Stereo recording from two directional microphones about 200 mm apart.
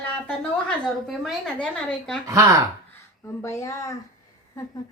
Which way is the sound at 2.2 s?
15° right (ahead or behind).